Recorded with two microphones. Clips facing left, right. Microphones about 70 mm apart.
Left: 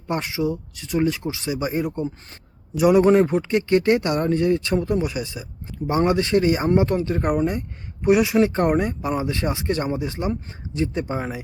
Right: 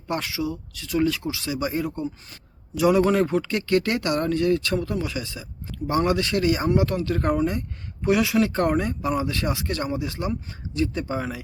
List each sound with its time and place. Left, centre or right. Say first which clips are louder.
0.1 s speech: left 3 dB; left